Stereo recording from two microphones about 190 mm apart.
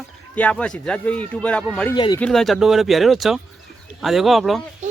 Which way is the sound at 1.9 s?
20° left (ahead or behind).